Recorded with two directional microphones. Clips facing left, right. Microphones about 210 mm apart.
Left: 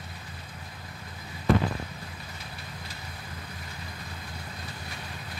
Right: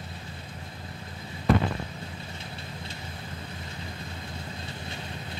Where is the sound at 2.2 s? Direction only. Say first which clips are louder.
Right 3 dB; 25° right (ahead or behind).